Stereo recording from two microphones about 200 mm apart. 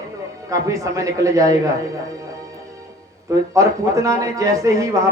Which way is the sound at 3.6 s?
15° right (ahead or behind).